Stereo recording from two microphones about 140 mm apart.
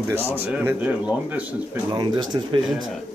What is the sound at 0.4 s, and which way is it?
Speech, 10° right (ahead or behind).